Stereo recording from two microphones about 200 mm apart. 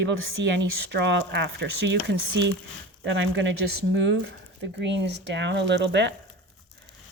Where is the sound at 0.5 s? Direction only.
60° right (ahead or behind).